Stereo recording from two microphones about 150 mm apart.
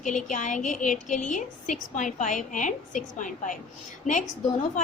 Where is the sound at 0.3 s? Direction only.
55° left (ahead or behind).